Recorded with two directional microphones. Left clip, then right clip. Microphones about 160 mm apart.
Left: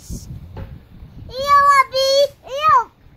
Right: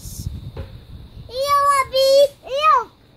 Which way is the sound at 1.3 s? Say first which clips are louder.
Left 4 dB; centre (ahead or behind).